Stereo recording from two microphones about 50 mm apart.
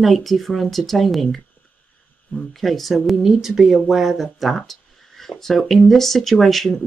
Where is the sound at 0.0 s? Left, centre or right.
Centre.